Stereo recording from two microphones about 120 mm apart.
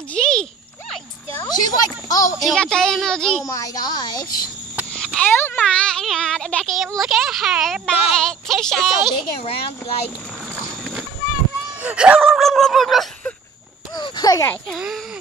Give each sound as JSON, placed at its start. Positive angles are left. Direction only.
{"t": 0.1, "sound": "a sound", "side_deg": 5}
{"t": 1.4, "sound": "speech", "side_deg": 35}
{"t": 2.4, "sound": "speech", "side_deg": 5}
{"t": 3.4, "sound": "a woman's voice", "side_deg": 30}
{"t": 4.9, "sound": "a sound", "side_deg": 0}
{"t": 5.2, "sound": "speech", "side_deg": 15}
{"t": 9.2, "sound": "speech", "side_deg": 50}
{"t": 11.8, "sound": "speech", "side_deg": -10}
{"t": 12.2, "sound": "speech", "side_deg": 0}
{"t": 13.9, "sound": "a sound", "side_deg": 35}
{"t": 14.7, "sound": "speech", "side_deg": -5}